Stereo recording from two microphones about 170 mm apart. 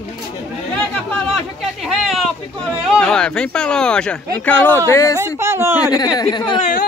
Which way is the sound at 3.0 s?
5° left (ahead or behind).